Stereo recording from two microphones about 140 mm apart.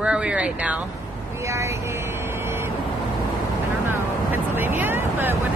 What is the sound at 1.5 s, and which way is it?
Speech, 20° right (ahead or behind).